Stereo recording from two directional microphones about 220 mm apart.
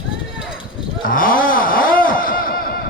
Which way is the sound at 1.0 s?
40° left (ahead or behind).